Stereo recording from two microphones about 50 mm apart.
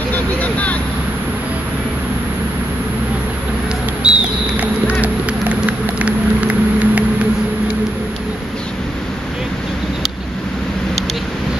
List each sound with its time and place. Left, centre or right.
0.1 s vehicle: left
4.0 s a sound: centre
5.0 s vehicle: right